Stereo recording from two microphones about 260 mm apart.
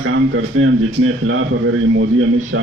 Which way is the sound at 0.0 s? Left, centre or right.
Right.